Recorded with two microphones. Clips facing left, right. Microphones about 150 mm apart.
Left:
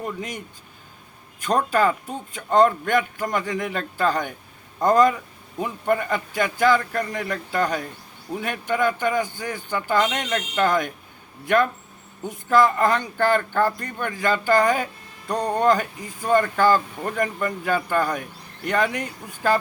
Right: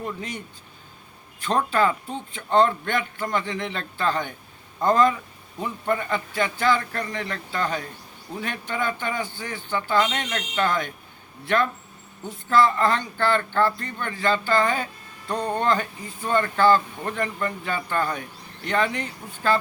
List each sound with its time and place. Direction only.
0.0 s speech: 10° left (ahead or behind)
1.5 s speech: 10° left (ahead or behind)